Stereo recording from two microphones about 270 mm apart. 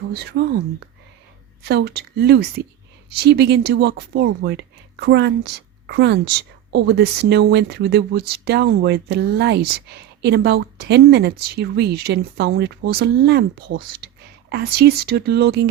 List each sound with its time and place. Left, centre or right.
0.1 s speech: right
1.6 s speech: right
14.0 s whispering: right
14.5 s speech: right